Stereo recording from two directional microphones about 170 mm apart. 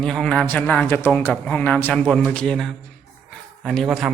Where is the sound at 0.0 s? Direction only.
5° left (ahead or behind).